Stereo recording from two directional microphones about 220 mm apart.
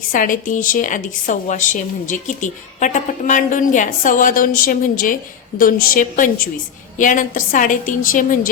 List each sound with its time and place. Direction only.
0.1 s a woman's voice: 35° left (ahead or behind)